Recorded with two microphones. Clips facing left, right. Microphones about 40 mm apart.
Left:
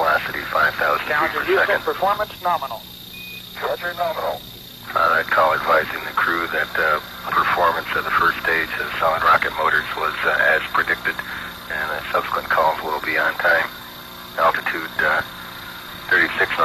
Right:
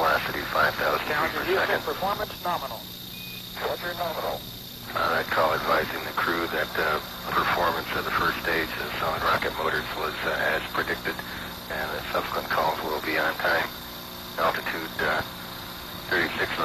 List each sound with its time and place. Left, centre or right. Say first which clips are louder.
0.0 s speech: left 5 dB; centre; by 16.6 s left